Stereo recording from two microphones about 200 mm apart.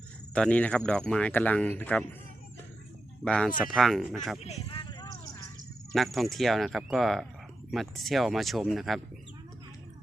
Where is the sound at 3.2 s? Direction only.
5° left (ahead or behind).